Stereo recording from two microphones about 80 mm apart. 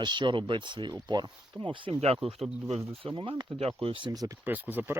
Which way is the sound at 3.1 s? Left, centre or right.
Right.